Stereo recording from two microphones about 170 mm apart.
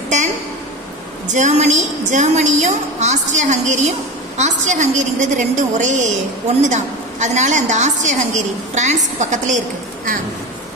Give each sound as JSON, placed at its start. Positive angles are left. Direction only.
{"t": 1.2, "sound": "a woman's voice", "side_deg": -45}